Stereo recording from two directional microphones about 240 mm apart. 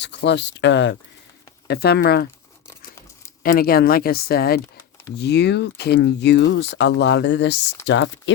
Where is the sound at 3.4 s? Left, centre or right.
Left.